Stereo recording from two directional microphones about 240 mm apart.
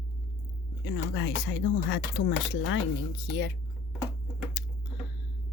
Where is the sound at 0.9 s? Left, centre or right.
Left.